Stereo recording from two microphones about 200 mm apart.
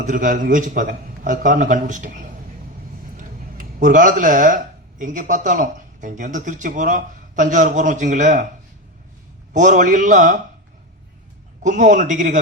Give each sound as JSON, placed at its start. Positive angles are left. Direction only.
{"t": 0.0, "sound": "speech", "side_deg": -40}
{"t": 3.6, "sound": "speech", "side_deg": -40}
{"t": 9.5, "sound": "speech", "side_deg": -40}
{"t": 11.6, "sound": "speech", "side_deg": -40}